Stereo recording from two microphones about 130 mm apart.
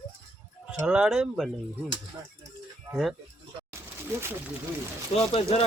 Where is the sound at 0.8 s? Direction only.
5° right (ahead or behind).